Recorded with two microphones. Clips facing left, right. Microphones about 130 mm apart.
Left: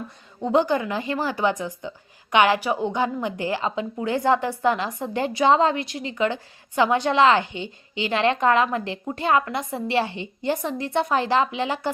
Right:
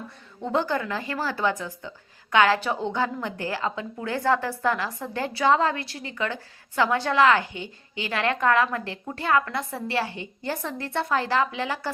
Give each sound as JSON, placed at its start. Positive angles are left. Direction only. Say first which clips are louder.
{"t": 0.4, "sound": "a woman's voice", "louder": "left 5 dB", "side_deg": 20}